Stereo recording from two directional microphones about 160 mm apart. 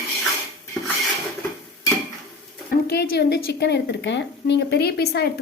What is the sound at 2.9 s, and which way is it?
A woman's voice, 90° left.